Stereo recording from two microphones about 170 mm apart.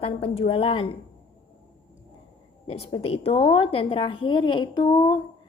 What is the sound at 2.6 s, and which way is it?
A woman's voice, 35° left (ahead or behind).